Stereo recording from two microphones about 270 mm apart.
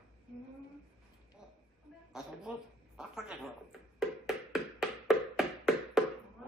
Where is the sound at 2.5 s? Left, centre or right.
Centre.